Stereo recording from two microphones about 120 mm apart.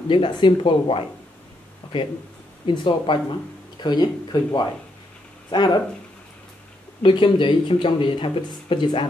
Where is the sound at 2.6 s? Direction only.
45° left (ahead or behind).